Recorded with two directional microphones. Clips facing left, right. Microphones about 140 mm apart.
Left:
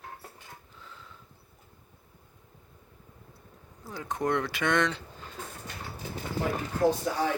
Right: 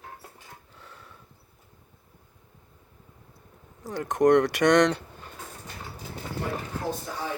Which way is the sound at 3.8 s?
80° right.